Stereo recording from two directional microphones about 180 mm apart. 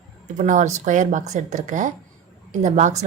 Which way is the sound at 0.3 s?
45° right (ahead or behind).